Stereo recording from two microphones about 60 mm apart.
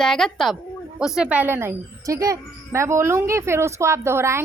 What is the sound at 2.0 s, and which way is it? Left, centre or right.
Female singing, right.